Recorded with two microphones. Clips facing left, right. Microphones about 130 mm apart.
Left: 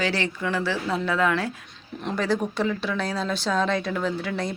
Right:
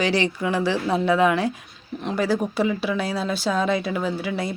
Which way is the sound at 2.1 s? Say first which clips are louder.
Right 2 dB; 5° right (ahead or behind).